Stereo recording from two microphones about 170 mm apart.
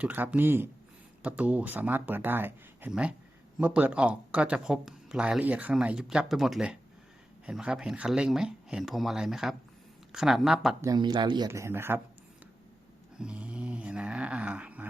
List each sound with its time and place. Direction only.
0.0 s speech: 10° right (ahead or behind)
10.8 s speech: 25° right (ahead or behind)
13.1 s a sound: 5° right (ahead or behind)